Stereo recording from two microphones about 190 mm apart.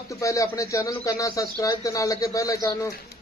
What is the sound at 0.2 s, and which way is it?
Speech, 15° left (ahead or behind).